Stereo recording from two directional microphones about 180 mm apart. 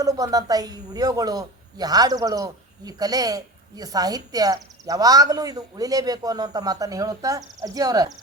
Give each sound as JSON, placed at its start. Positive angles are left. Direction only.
{"t": 0.0, "sound": "a woman's voice", "side_deg": -20}